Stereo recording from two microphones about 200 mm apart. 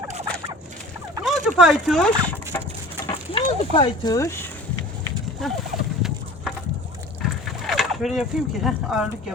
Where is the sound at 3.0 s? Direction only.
25° left (ahead or behind).